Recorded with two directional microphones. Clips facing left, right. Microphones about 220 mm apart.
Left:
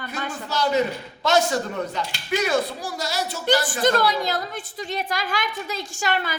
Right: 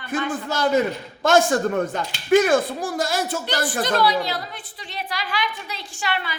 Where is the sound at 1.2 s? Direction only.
50° right (ahead or behind).